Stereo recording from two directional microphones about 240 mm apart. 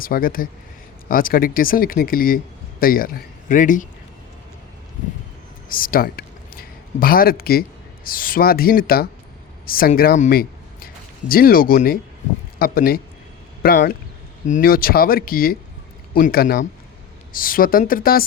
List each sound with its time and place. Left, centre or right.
0.0 s speech: left
5.6 s a sound: left
8.0 s speech: left